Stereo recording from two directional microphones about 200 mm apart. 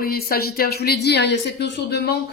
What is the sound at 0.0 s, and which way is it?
Speech, 50° left (ahead or behind).